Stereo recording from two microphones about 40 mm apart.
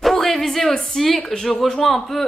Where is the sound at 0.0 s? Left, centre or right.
Centre.